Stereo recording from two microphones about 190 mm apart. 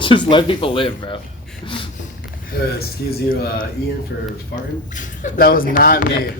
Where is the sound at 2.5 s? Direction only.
55° left (ahead or behind).